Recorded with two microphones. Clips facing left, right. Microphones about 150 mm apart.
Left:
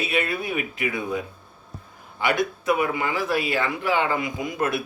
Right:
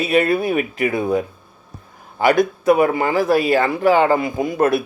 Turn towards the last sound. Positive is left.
turn(degrees=-40)  # may be behind; listen again after turning